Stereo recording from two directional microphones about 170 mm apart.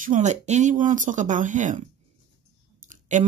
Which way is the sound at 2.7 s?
45° right (ahead or behind).